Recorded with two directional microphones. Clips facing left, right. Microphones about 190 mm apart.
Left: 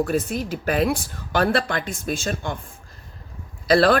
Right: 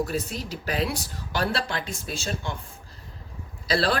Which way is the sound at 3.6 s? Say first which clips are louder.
Left 8 dB; 55° left (ahead or behind).